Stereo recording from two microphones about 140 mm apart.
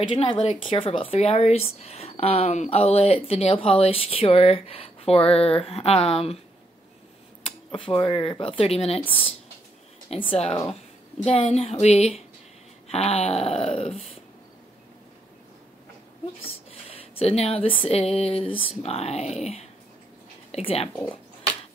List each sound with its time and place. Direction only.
0.0 s speech: 35° left (ahead or behind)
7.7 s speech: 35° left (ahead or behind)
10.0 s speech: 45° left (ahead or behind)
16.4 s speech: 45° left (ahead or behind)